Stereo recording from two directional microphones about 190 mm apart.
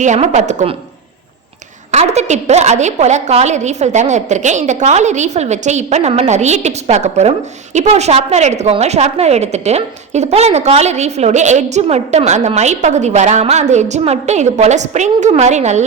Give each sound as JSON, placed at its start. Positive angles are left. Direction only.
{"t": 0.0, "sound": "a woman's voice", "side_deg": -40}
{"t": 1.9, "sound": "a woman's voice", "side_deg": -35}